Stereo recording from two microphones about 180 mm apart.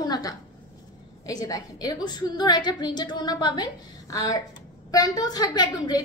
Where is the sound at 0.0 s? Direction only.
20° left (ahead or behind).